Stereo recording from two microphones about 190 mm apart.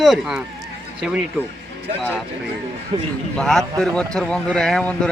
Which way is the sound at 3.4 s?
Centre (ahead or behind).